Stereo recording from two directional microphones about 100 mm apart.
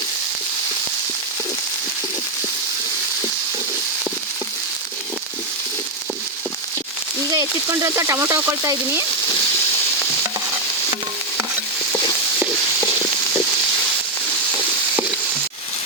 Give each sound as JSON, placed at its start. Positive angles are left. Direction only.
{"t": 7.3, "sound": "speech", "side_deg": -35}